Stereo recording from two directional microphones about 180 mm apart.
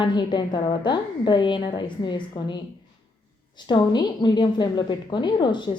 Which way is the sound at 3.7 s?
25° left (ahead or behind).